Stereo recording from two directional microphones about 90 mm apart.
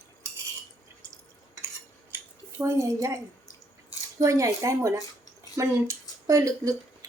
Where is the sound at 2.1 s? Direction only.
30° right (ahead or behind).